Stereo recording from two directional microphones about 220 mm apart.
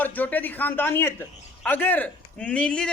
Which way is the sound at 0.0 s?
5° left (ahead or behind).